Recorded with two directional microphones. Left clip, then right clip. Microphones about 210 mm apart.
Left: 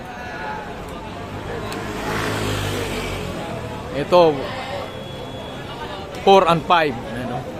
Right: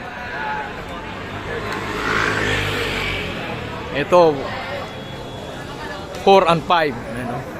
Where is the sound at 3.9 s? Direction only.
Centre (ahead or behind).